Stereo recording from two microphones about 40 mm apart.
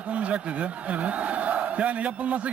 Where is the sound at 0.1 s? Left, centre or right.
Right.